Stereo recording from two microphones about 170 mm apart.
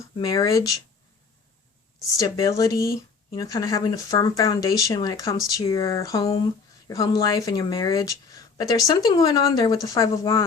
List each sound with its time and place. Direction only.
0.2 s speech: 20° left (ahead or behind)
2.1 s speech: 20° left (ahead or behind)